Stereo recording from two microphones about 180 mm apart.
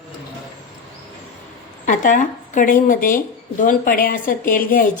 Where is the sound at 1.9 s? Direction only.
45° left (ahead or behind).